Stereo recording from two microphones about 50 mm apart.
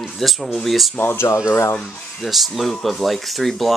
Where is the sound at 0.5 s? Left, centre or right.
Centre.